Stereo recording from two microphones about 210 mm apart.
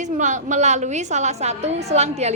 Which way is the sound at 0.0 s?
35° right (ahead or behind).